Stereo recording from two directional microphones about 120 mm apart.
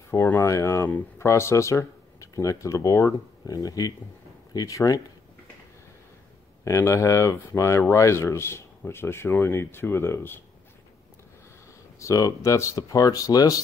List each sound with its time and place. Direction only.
0.1 s speech: 25° left (ahead or behind)
6.6 s speech: 25° left (ahead or behind)
12.0 s speech: 25° left (ahead or behind)